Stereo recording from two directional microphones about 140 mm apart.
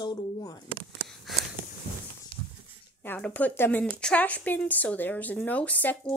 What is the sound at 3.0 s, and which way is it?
A woman's voice, 10° left (ahead or behind).